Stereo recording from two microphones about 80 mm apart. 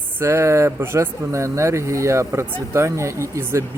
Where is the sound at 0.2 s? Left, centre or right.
Right.